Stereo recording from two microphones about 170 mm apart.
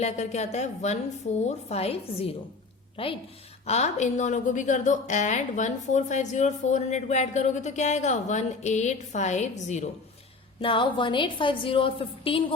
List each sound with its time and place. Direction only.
0.0 s a woman's voice: 40° left (ahead or behind)
10.6 s a woman's voice: 30° left (ahead or behind)